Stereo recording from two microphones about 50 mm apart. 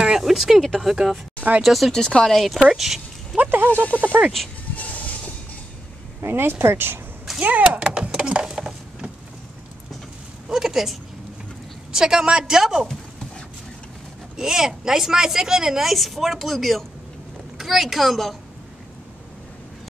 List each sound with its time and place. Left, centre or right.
0.2 s speech: centre
1.9 s speech: centre
3.4 s speech: right
3.9 s speech: right
4.7 s train: left
6.2 s speech: right
7.3 s speech: right
7.8 s speech: centre
8.5 s a sound: centre
10.5 s a woman's voice: centre
14.3 s a woman's voice: centre